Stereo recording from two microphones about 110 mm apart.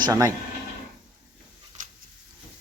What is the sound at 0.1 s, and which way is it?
Speech, 30° right (ahead or behind).